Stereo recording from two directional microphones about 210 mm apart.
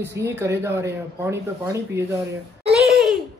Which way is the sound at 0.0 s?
10° right (ahead or behind).